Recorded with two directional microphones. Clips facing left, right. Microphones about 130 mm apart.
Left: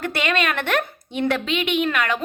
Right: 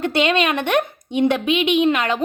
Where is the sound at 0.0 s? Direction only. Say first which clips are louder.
Right 5 dB; 20° right (ahead or behind).